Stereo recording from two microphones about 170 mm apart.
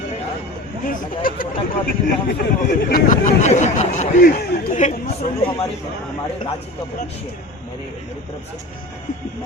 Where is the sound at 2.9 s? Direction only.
55° left (ahead or behind).